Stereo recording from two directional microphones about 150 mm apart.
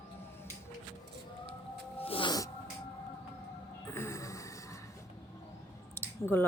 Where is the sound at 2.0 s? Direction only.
40° left (ahead or behind).